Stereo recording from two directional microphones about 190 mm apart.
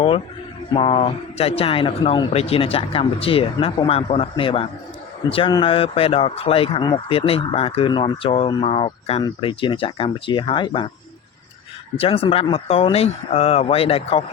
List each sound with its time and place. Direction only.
0.7 s speech: 30° left (ahead or behind)
11.9 s speech: 30° left (ahead or behind)